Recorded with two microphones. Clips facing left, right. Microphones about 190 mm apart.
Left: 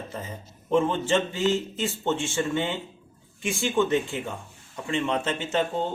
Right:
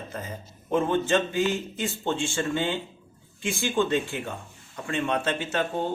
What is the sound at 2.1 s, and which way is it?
Speech, 20° left (ahead or behind).